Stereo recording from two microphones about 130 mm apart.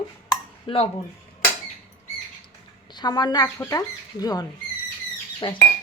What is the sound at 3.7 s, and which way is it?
Speech, 30° left (ahead or behind).